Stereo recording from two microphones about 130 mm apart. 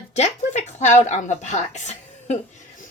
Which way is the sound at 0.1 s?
60° left (ahead or behind).